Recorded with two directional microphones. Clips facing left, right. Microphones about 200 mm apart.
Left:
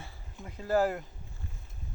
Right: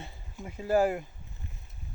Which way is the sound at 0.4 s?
10° right (ahead or behind).